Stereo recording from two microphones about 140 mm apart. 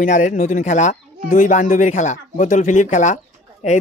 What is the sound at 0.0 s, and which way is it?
Speech, 70° left (ahead or behind).